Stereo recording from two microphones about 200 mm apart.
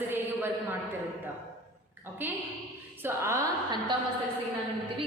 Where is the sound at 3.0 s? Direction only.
15° right (ahead or behind).